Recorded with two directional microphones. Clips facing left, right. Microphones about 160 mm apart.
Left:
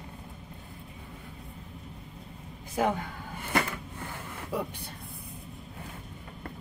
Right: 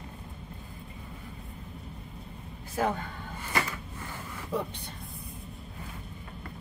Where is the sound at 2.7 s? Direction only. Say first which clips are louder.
Left 1 dB; 15° left (ahead or behind).